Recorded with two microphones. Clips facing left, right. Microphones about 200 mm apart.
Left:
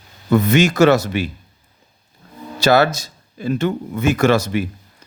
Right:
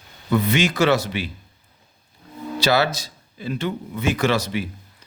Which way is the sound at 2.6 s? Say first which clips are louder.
Left 6 dB; 45° left (ahead or behind).